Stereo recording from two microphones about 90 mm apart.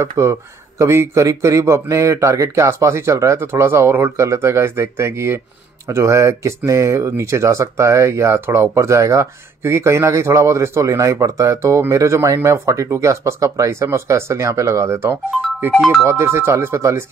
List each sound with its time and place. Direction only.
0.0 s speech: 35° right (ahead or behind)
15.8 s speech: 5° left (ahead or behind)
16.1 s speech: 30° right (ahead or behind)